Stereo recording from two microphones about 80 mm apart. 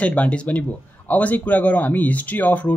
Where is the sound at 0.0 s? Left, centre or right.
Centre.